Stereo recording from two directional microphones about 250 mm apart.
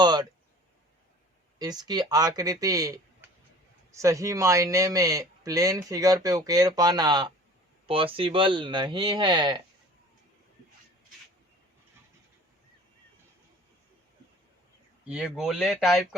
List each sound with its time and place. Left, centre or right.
0.0 s speech: centre
1.5 s speech: centre
15.0 s speech: centre